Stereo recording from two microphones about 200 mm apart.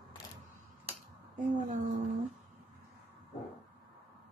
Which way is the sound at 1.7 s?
40° right (ahead or behind).